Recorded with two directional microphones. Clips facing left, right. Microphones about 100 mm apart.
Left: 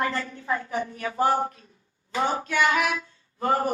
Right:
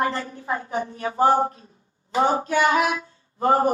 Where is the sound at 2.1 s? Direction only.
30° right (ahead or behind).